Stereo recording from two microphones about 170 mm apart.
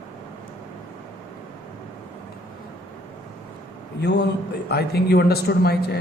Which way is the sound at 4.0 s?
85° left.